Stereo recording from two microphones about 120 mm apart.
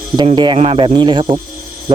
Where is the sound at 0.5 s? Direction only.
50° right (ahead or behind).